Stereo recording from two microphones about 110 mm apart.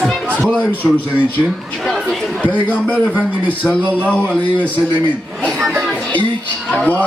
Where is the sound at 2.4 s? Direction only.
10° left (ahead or behind).